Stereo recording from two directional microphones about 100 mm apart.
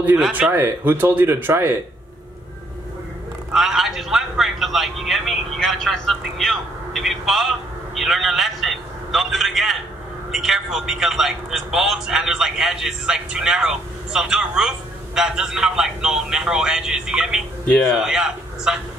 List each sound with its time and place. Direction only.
0.3 s speech: 20° right (ahead or behind)
3.5 s a man's voice: 5° right (ahead or behind)